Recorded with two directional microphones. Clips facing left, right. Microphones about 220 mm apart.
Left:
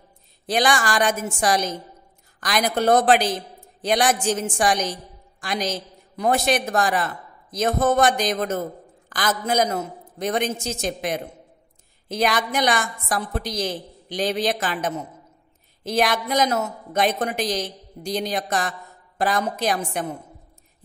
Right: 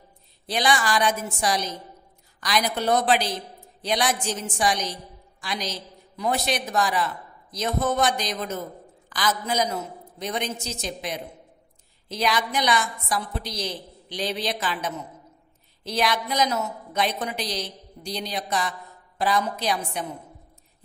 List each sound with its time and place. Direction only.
0.5 s a woman's voice: 45° left (ahead or behind)